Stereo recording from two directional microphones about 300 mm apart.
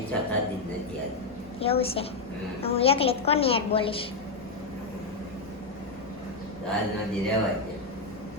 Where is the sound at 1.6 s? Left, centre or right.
Centre.